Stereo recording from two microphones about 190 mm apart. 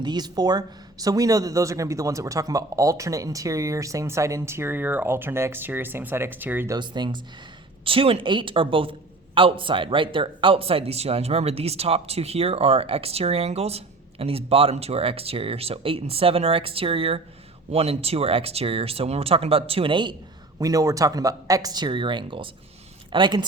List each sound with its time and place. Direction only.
0.0 s speech: 20° right (ahead or behind)
6.7 s a man's voice: 25° right (ahead or behind)